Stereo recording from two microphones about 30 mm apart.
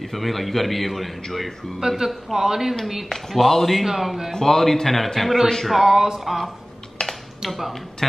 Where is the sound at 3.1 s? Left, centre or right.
Centre.